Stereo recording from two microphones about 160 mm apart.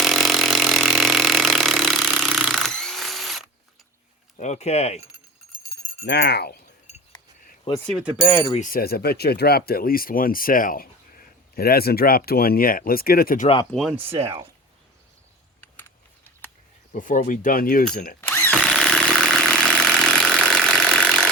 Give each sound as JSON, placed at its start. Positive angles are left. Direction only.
{"t": 0.0, "sound": "vehicle", "side_deg": 0}
{"t": 4.4, "sound": "speech", "side_deg": 45}
{"t": 6.1, "sound": "speech", "side_deg": 90}
{"t": 8.5, "sound": "speech", "side_deg": 60}
{"t": 11.5, "sound": "speech", "side_deg": 70}
{"t": 13.7, "sound": "speech", "side_deg": 0}
{"t": 14.0, "sound": "speech", "side_deg": -35}
{"t": 16.9, "sound": "speech", "side_deg": 55}
{"t": 18.2, "sound": "drill", "side_deg": 15}
{"t": 18.5, "sound": "chainsaw", "side_deg": 5}
{"t": 19.8, "sound": "engine", "side_deg": 5}